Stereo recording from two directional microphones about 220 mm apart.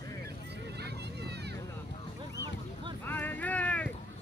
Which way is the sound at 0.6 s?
50° right (ahead or behind).